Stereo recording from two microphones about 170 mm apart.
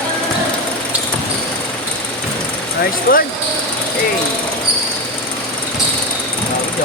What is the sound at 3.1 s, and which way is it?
Speech, 55° left (ahead or behind).